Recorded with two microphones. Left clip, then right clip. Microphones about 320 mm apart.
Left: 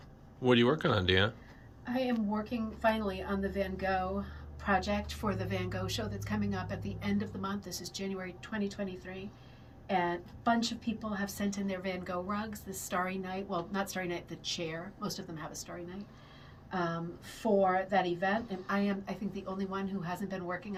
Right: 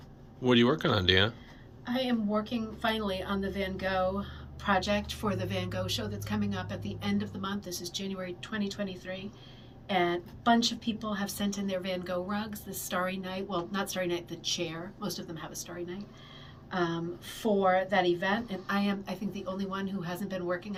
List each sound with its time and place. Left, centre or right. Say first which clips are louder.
0.4 s a woman's voice: right 2 dB; centre
16.7 s a woman's voice: right 3 dB; centre